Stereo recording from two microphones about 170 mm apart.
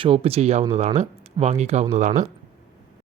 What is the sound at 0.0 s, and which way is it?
Speech, 35° right (ahead or behind).